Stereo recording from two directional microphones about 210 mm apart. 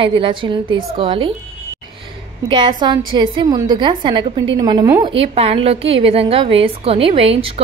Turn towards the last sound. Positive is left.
turn(degrees=-25)  # may be behind; listen again after turning